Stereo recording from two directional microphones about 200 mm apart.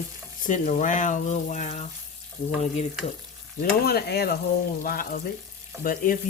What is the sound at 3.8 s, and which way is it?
Speech, 50° left (ahead or behind).